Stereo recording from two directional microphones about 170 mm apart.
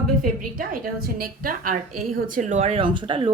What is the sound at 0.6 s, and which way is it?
A woman's voice, 55° right (ahead or behind).